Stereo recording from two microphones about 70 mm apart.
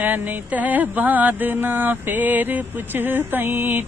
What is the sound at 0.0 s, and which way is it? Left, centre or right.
Mantra, right.